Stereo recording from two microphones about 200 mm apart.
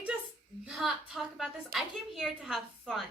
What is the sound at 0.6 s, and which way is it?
A woman's voice, centre (ahead or behind).